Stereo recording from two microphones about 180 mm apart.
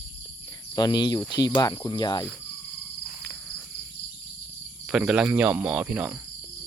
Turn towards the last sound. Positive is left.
turn(degrees=-10)  # may be behind; listen again after turning